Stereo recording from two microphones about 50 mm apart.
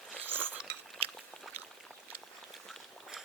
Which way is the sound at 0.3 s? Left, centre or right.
Right.